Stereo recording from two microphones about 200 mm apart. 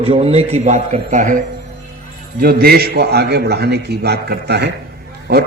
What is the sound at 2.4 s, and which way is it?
A man's voice, 50° right (ahead or behind).